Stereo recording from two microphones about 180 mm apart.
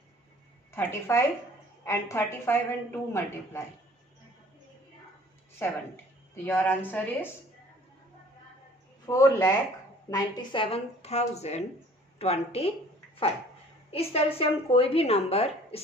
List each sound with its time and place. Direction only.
0.7 s a woman's voice: 15° left (ahead or behind)
5.6 s a woman's voice: 10° left (ahead or behind)
9.0 s a woman's voice: 15° left (ahead or behind); by 15.8 s 35° left (ahead or behind)